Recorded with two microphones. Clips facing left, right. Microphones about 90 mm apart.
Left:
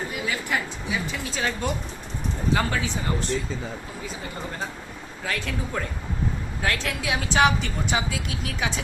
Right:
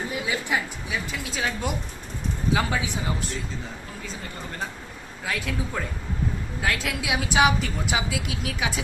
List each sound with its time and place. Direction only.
0.3 s a sound: 20° right (ahead or behind)
0.9 s a woman's voice: centre (ahead or behind)
2.7 s speech: 15° right (ahead or behind)
5.2 s a woman's voice: 5° right (ahead or behind)